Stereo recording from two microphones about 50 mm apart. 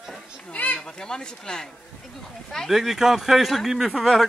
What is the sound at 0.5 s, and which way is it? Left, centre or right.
Speech, left.